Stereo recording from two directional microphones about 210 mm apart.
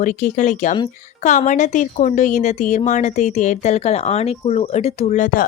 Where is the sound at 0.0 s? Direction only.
35° left (ahead or behind).